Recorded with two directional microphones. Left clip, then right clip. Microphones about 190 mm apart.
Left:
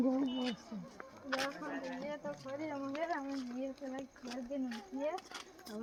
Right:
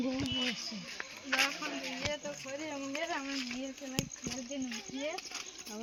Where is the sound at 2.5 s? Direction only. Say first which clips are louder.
Right 1 dB; centre (ahead or behind).